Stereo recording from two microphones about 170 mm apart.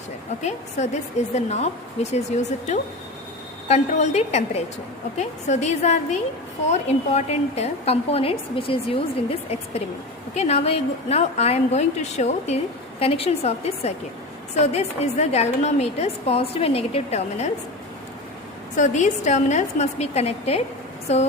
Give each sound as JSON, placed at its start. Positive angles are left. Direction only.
{"t": 0.8, "sound": "a woman's voice", "side_deg": 40}
{"t": 10.3, "sound": "a woman's voice", "side_deg": 40}
{"t": 18.8, "sound": "a woman's voice", "side_deg": 45}